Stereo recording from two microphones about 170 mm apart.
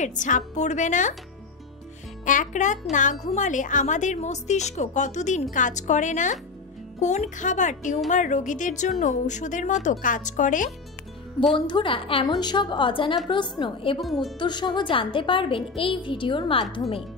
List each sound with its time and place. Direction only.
0.0 s speech: 50° left (ahead or behind)
2.2 s speech: 50° left (ahead or behind)
11.5 s a woman's voice: 30° left (ahead or behind)
14.0 s a woman's voice: centre (ahead or behind)
14.4 s a woman's voice: 25° left (ahead or behind)